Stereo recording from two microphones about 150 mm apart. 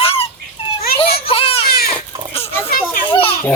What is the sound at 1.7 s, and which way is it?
Goat, 90° left.